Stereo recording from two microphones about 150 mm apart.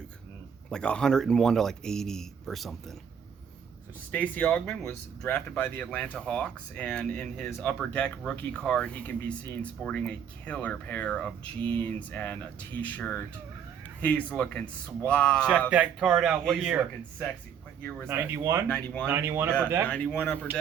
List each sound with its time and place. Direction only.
0.7 s speech: 5° left (ahead or behind)
4.1 s speech: 10° left (ahead or behind)
15.7 s speech: 5° right (ahead or behind)
18.1 s speech: 15° right (ahead or behind)
18.7 s speech: 5° left (ahead or behind)
19.0 s speech: 15° right (ahead or behind)
19.9 s speech: 10° left (ahead or behind)